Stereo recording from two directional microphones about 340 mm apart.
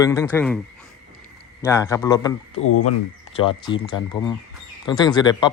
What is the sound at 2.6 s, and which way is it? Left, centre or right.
Speech, left.